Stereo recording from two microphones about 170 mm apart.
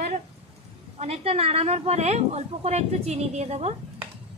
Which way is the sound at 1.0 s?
35° right (ahead or behind).